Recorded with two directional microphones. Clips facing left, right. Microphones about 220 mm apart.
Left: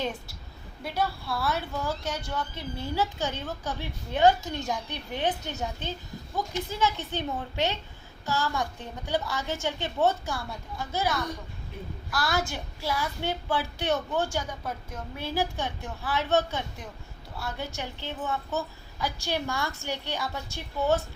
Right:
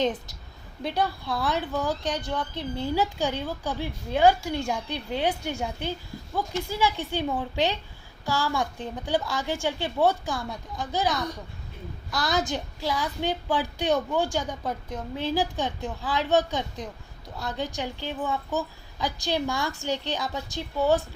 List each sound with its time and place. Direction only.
0.0 s a woman's voice: 20° right (ahead or behind)
12.1 s a woman's voice: 20° right (ahead or behind)